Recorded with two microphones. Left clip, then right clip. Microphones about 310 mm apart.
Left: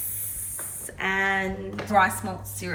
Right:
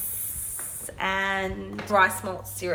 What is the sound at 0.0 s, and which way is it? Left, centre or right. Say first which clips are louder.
Spray: even; centre.